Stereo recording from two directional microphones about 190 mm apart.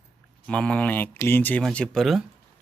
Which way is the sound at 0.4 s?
5° left (ahead or behind).